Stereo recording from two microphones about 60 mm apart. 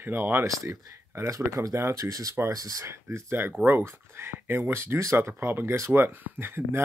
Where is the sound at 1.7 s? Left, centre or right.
Right.